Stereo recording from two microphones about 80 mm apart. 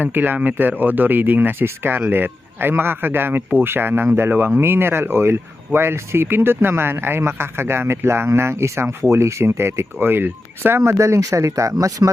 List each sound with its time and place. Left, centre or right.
0.0 s speech: right